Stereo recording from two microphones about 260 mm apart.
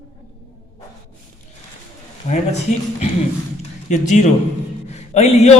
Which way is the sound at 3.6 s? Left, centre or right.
Left.